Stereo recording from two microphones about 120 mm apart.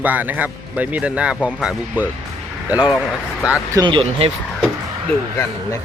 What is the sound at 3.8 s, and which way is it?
Speech, 45° right (ahead or behind).